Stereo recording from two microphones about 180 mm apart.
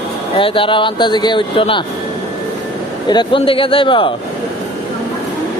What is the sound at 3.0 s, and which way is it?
Speech, 25° left (ahead or behind).